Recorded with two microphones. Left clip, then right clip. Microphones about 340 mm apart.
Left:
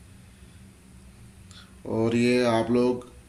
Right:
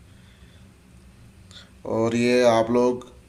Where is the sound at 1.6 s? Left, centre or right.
Centre.